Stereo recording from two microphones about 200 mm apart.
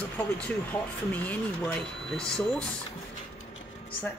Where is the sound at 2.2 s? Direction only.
5° left (ahead or behind).